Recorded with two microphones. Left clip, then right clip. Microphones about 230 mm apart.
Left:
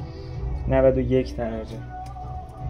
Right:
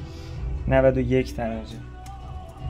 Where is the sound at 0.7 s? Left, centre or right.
Right.